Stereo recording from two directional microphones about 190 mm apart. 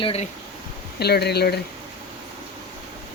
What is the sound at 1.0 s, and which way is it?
Speech, 60° left (ahead or behind).